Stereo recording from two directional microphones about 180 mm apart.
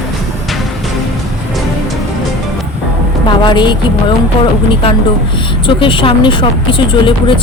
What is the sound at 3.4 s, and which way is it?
Speech, 25° left (ahead or behind).